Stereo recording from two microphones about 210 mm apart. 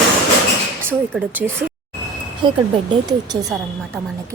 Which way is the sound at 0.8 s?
10° right (ahead or behind).